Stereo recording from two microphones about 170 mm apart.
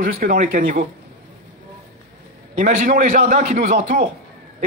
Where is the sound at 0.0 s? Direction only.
55° right (ahead or behind).